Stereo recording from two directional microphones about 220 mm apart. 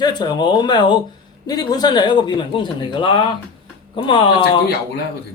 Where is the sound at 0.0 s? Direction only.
20° left (ahead or behind).